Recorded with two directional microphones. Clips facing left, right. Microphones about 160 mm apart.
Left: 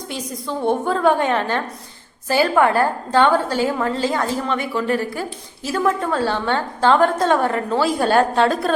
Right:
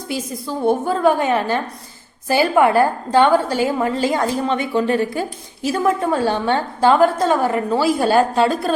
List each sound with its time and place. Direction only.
0.1 s a woman's voice: 5° right (ahead or behind)